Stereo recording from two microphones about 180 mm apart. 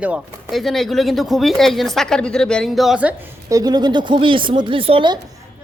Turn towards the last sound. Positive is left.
turn(degrees=-30)  # may be behind; listen again after turning